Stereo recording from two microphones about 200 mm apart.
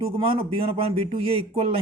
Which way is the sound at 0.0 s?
25° right (ahead or behind).